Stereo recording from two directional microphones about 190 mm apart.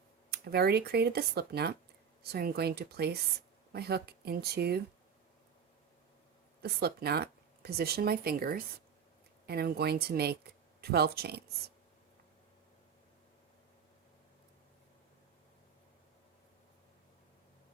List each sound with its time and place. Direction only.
0.3 s speech: 55° right (ahead or behind)
6.6 s speech: 55° right (ahead or behind)